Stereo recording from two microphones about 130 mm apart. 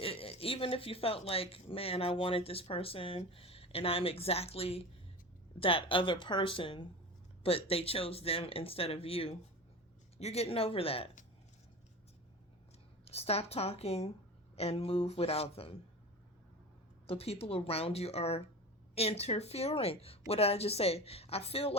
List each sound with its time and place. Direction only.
0.0 s a woman's voice: 50° left (ahead or behind)
13.1 s speech: 50° left (ahead or behind)
17.1 s speech: 50° left (ahead or behind)